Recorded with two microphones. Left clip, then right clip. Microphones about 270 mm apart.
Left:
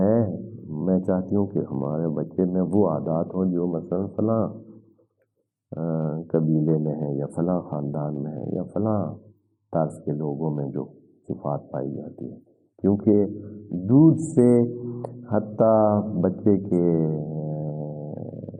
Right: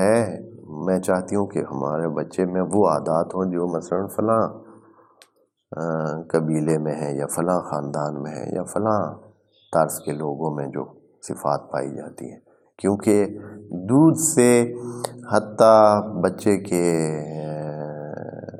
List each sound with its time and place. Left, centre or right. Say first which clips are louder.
0.0 s a sound: right 4 dB; centre
0.8 s speech: right 3 dB; centre
5.7 s speech: right 4 dB; right